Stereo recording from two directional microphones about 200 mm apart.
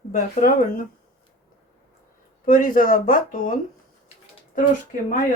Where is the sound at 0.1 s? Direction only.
45° left (ahead or behind).